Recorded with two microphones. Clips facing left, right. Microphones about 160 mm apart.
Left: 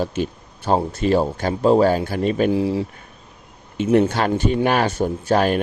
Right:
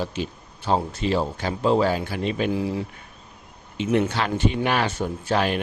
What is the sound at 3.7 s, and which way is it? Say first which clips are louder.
Speech: left 5 dB; 50° left (ahead or behind).